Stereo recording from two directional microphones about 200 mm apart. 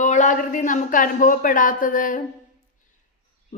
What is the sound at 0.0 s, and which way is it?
A woman's voice, 40° left (ahead or behind).